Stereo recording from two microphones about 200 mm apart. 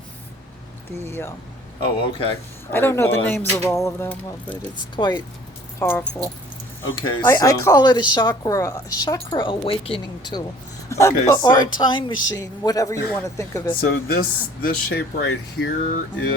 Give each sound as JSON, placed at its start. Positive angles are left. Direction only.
{"t": 1.8, "sound": "a woman's voice", "side_deg": 25}
{"t": 2.6, "sound": "speech", "side_deg": 10}
{"t": 4.9, "sound": "a woman's voice", "side_deg": 20}
{"t": 5.8, "sound": "speech", "side_deg": 10}
{"t": 6.9, "sound": "a woman's voice", "side_deg": 20}
{"t": 12.1, "sound": "speech", "side_deg": 70}
{"t": 12.6, "sound": "speech", "side_deg": 15}
{"t": 13.8, "sound": "speech", "side_deg": 50}